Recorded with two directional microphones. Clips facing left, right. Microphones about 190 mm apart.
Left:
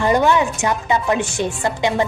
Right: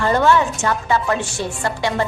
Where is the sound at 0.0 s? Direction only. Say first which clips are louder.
Even; 15° left (ahead or behind).